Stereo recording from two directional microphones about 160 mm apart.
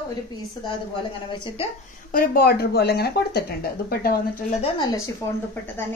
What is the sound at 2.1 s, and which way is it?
Speech, 65° left (ahead or behind).